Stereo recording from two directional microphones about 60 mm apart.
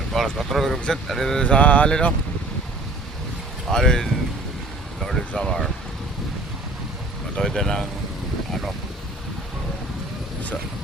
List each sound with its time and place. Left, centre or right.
0.1 s speech: centre
1.4 s speech: left
3.7 s speech: centre
4.9 s a sound: centre
5.3 s speech: centre
7.3 s speech: centre